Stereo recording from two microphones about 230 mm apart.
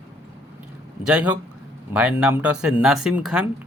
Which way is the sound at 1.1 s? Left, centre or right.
Centre.